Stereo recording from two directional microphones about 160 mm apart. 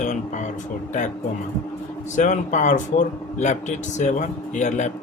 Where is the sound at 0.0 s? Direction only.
45° left (ahead or behind).